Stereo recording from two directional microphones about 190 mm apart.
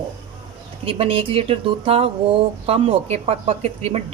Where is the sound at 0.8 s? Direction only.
30° right (ahead or behind).